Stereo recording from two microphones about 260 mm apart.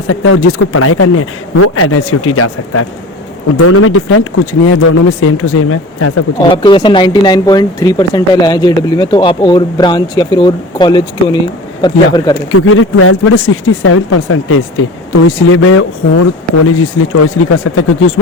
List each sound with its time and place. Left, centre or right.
0.1 s speech: left
6.5 s speech: centre
12.5 s speech: left